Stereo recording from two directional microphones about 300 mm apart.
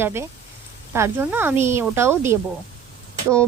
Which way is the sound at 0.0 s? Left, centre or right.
Centre.